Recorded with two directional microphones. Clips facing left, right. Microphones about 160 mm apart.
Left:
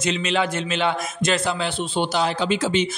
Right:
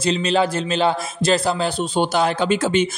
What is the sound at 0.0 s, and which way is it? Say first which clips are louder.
A man's voice: right 4 dB; 35° right (ahead or behind).